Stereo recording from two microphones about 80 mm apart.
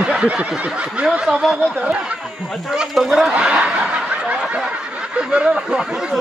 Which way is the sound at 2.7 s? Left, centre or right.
Centre.